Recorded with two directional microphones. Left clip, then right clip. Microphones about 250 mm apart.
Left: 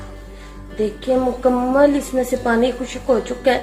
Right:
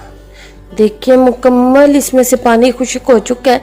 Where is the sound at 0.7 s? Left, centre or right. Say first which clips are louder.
Right 11 dB; right.